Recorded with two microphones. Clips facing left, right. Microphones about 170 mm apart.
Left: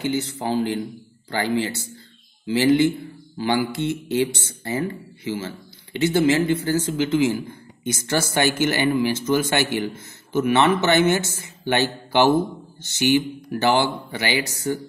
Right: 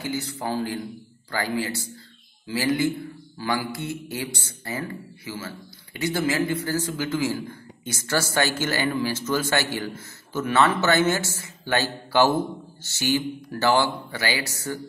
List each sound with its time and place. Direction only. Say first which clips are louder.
0.0 s a man's voice: left 5 dB; 25° left (ahead or behind)